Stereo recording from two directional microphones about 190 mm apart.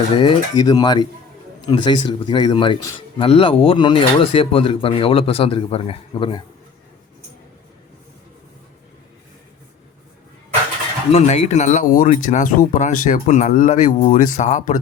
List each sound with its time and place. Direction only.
0.1 s speech: 25° left (ahead or behind)
11.1 s speech: 35° left (ahead or behind)